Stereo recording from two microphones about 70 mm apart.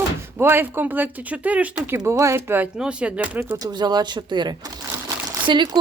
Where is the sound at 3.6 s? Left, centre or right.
Right.